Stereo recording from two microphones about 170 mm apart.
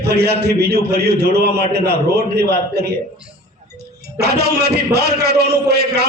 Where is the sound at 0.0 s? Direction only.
75° right (ahead or behind).